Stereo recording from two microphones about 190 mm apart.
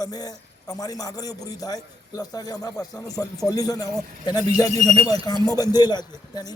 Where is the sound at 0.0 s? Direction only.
20° left (ahead or behind).